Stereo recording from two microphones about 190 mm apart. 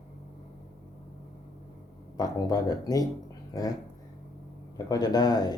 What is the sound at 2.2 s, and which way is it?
Speech, 20° left (ahead or behind).